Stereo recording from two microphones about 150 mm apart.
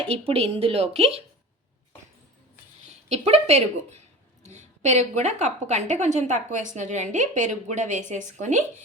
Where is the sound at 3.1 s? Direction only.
45° right (ahead or behind).